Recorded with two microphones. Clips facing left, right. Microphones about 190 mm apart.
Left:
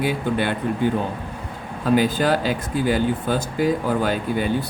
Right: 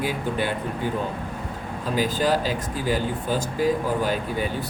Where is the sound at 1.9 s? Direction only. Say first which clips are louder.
Left 2 dB; 65° left (ahead or behind).